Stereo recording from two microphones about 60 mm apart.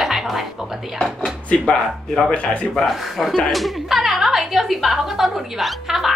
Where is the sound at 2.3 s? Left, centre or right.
Left.